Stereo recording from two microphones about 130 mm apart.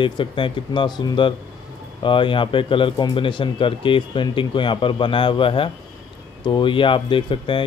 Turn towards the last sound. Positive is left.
turn(degrees=40)  # may be behind; listen again after turning